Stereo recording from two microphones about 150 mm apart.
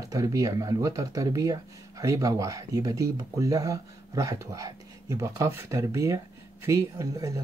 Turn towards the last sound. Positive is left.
turn(degrees=-20)  # may be behind; listen again after turning